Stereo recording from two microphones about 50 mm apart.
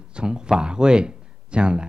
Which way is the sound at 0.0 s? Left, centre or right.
Centre.